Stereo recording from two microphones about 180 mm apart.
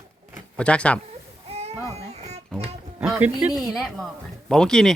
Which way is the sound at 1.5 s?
35° right (ahead or behind).